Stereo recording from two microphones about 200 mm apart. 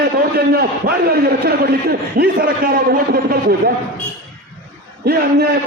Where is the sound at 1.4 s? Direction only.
50° right (ahead or behind).